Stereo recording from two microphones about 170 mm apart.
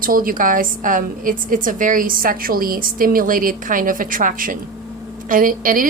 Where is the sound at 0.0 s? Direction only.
55° right (ahead or behind).